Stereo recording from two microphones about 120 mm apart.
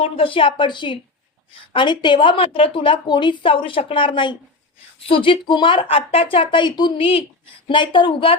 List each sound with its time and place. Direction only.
0.0 s a woman's voice: 50° left (ahead or behind)
7.0 s a woman's voice: 50° left (ahead or behind)